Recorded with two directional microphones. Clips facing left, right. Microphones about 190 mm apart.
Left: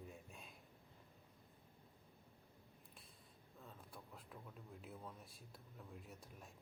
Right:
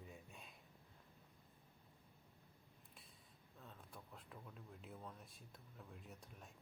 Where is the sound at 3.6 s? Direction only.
5° left (ahead or behind).